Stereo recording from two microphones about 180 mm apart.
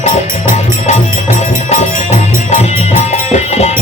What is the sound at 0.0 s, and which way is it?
Music, 40° left (ahead or behind).